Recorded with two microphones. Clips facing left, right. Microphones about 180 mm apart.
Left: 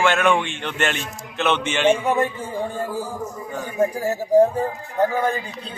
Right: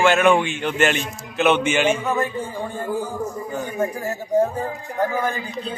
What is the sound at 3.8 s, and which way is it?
Speech, 30° left (ahead or behind).